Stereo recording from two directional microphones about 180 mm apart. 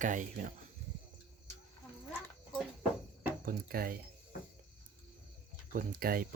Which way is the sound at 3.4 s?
55° right (ahead or behind).